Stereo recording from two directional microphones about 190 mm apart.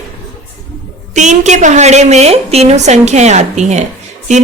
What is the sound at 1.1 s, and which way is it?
Speech, 40° right (ahead or behind).